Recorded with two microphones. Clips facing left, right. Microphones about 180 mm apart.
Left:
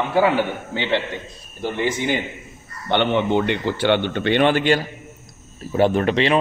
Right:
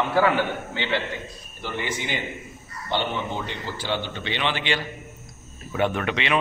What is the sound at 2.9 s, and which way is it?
A man's voice, 65° left (ahead or behind).